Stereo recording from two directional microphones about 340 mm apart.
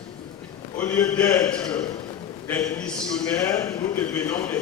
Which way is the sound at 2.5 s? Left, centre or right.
Centre.